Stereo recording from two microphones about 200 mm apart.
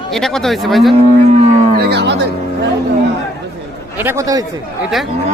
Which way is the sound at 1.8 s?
55° right (ahead or behind).